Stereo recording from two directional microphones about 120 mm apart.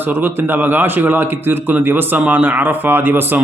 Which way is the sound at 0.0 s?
15° right (ahead or behind).